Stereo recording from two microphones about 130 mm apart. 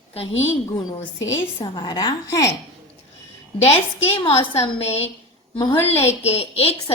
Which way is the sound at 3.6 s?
50° left (ahead or behind).